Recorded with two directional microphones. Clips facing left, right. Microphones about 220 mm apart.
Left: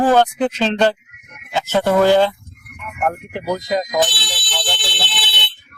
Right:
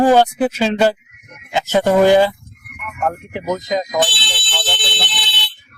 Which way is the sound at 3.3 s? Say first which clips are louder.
Even; centre (ahead or behind).